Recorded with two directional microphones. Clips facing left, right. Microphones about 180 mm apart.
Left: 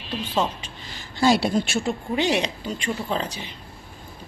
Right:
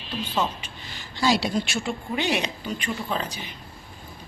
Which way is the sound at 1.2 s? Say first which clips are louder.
Left 4 dB; 50° left (ahead or behind).